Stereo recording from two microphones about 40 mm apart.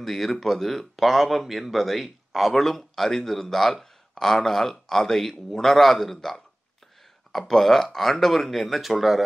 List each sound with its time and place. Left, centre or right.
0.0 s speech: centre